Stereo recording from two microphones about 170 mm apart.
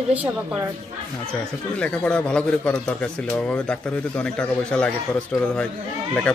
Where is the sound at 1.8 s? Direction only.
5° left (ahead or behind).